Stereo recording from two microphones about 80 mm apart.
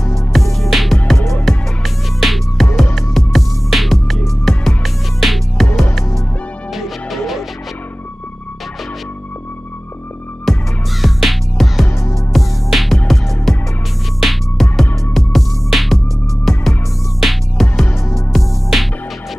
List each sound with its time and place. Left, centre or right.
0.3 s music: centre
1.1 s music: left
1.4 s music: centre
6.7 s music: centre
10.4 s music: centre
11.8 s music: left
12.3 s music: centre
17.2 s music: centre
17.9 s music: left
18.3 s music: centre